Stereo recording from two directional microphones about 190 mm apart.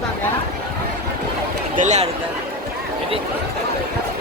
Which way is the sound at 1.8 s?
40° right (ahead or behind).